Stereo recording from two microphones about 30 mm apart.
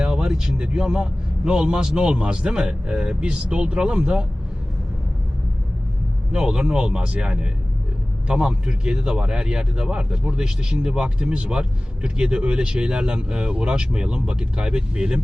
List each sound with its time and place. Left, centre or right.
0.0 s a sound: right
0.4 s a man's voice: right
6.3 s speech: right
10.4 s speech: centre
10.9 s speech: right